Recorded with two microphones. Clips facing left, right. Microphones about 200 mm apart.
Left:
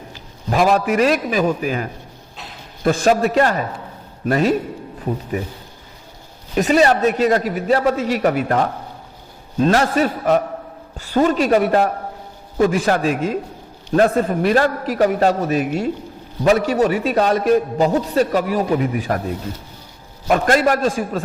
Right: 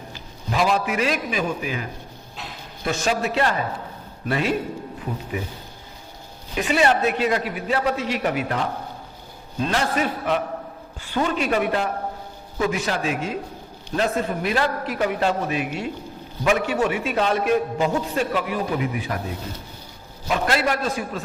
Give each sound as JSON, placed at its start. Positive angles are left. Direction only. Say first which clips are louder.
{"t": 0.5, "sound": "a man's voice", "louder": "left 6 dB", "side_deg": 50}
{"t": 6.5, "sound": "a man's voice", "louder": "left 5 dB", "side_deg": 40}
{"t": 9.6, "sound": "a man's voice", "louder": "left 7 dB", "side_deg": 45}
{"t": 20.2, "sound": "a man's voice", "louder": "left 6 dB", "side_deg": 50}